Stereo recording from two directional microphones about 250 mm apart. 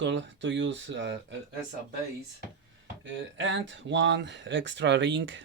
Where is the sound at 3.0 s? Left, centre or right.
Right.